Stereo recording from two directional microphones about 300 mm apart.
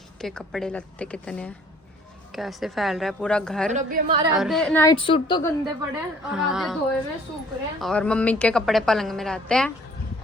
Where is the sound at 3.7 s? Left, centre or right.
Right.